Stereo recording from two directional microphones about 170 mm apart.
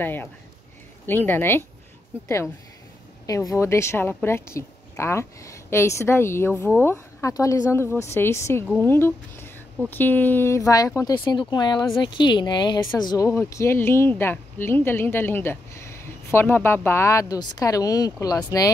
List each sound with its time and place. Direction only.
0.0 s speech: 10° left (ahead or behind)